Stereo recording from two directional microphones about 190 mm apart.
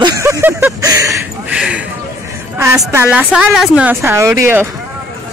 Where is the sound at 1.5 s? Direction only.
5° right (ahead or behind).